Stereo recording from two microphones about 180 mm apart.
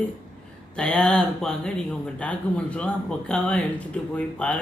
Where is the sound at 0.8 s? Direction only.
5° left (ahead or behind).